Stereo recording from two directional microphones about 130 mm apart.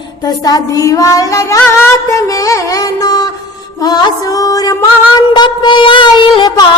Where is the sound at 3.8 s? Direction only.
30° left (ahead or behind).